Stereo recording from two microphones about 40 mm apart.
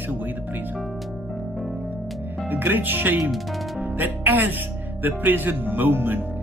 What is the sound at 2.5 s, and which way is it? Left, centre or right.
Speech, right.